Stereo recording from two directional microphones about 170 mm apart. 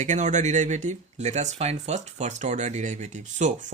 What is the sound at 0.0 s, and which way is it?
Speech, 45° right (ahead or behind).